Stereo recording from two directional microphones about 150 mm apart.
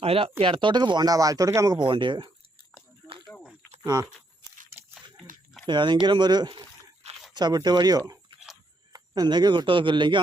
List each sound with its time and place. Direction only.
0.0 s speech: 40° right (ahead or behind)
5.6 s a man's voice: 30° right (ahead or behind)